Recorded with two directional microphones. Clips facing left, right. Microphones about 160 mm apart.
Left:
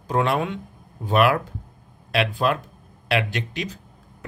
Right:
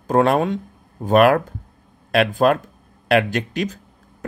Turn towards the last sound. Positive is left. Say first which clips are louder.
# right 6 dB
turn(degrees=-45)  # may be behind; listen again after turning